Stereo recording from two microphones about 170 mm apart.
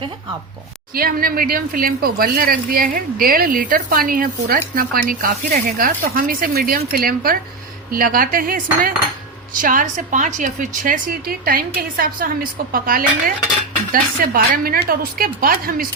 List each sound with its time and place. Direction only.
0.9 s a woman's voice: 60° right (ahead or behind)